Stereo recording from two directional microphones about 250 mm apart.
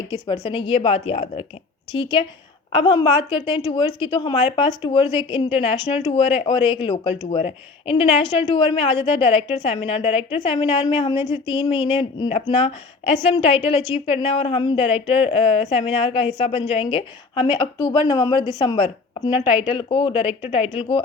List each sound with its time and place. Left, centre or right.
0.1 s a woman's voice: centre